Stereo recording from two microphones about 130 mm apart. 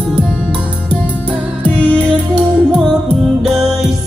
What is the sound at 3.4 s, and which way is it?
Music, 5° right (ahead or behind).